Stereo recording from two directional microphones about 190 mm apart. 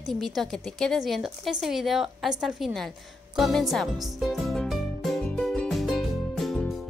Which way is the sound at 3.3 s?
Centre (ahead or behind).